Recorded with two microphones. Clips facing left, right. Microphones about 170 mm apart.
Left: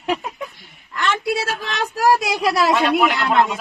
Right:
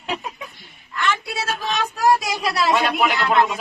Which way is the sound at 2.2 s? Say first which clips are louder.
Left 4 dB; 70° left (ahead or behind).